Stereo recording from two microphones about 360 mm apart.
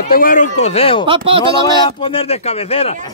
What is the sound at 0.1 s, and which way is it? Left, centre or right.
Speech, left.